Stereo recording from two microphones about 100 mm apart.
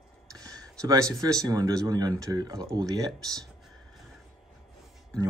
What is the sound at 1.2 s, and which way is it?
Speech, 35° right (ahead or behind).